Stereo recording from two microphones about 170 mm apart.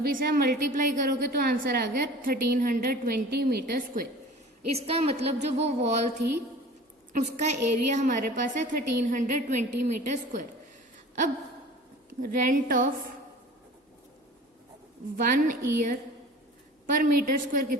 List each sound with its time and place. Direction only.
0.0 s a woman's voice: 55° right (ahead or behind)
4.7 s a woman's voice: 35° right (ahead or behind)
7.1 s a woman's voice: 45° right (ahead or behind)
12.2 s a woman's voice: 50° right (ahead or behind)
15.1 s a woman's voice: 55° right (ahead or behind)